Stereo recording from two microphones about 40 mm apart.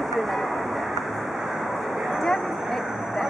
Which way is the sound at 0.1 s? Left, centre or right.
Centre.